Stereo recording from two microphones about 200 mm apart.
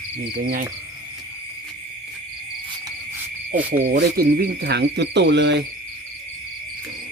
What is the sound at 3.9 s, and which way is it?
Cricket, 50° right (ahead or behind).